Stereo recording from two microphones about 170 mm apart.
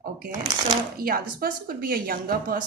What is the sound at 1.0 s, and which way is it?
Speech, 60° right (ahead or behind).